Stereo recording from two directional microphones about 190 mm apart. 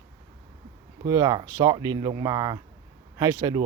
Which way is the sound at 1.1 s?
20° right (ahead or behind).